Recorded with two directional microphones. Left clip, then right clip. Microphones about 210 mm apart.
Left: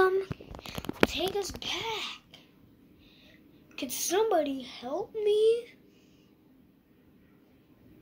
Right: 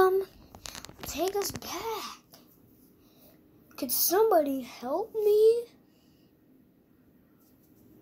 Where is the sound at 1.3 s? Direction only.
25° right (ahead or behind).